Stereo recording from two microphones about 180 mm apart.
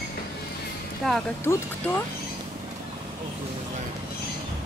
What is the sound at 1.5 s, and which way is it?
Speech, 15° left (ahead or behind).